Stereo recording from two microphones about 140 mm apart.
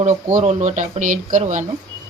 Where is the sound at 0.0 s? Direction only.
65° right (ahead or behind).